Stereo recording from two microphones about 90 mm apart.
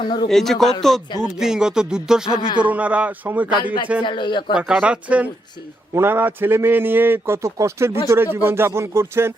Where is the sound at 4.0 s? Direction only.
60° left (ahead or behind).